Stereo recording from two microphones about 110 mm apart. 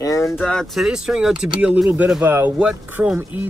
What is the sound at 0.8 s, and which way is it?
Speech, 5° right (ahead or behind).